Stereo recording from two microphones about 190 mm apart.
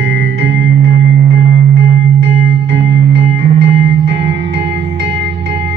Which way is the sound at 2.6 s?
65° right (ahead or behind).